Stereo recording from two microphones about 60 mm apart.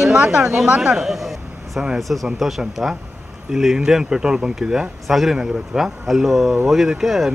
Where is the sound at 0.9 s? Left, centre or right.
Centre.